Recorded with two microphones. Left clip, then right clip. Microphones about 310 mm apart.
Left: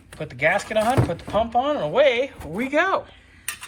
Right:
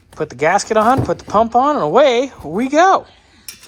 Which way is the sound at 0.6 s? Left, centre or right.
Right.